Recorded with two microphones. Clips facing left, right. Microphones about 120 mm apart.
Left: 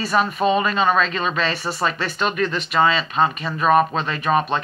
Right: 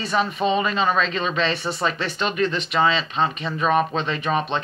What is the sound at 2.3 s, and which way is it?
Speech, 30° right (ahead or behind).